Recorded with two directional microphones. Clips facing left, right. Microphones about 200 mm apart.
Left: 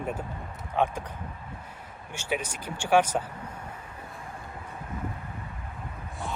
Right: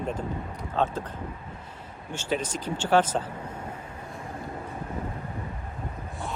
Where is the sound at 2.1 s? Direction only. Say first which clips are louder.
Right 3 dB; 10° left (ahead or behind).